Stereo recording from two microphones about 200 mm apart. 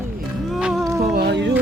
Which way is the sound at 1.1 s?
55° right (ahead or behind).